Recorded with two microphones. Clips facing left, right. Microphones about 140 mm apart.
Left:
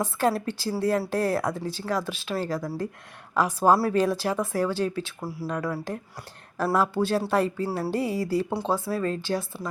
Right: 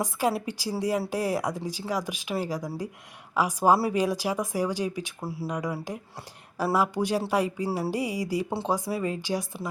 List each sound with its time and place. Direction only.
0.0 s speech: 10° right (ahead or behind)
5.2 s speech: 25° right (ahead or behind)
5.5 s speech: 15° right (ahead or behind)
6.7 s speech: 15° right (ahead or behind)